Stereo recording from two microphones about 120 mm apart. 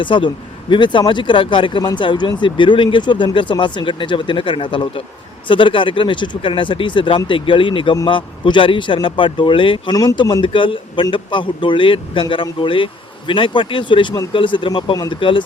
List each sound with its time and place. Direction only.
0.0 s a man's voice: 45° left (ahead or behind)
9.9 s a man's voice: 35° left (ahead or behind)